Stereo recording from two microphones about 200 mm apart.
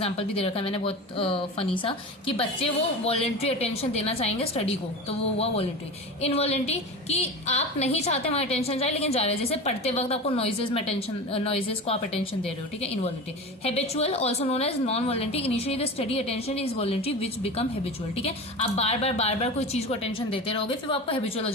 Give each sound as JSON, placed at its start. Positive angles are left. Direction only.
{"t": 0.0, "sound": "a woman's voice", "side_deg": 30}